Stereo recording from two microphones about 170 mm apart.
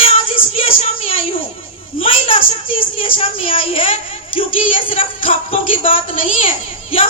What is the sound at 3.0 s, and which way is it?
A woman's voice, 30° left (ahead or behind).